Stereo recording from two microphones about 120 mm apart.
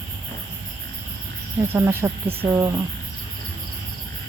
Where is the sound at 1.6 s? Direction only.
20° right (ahead or behind).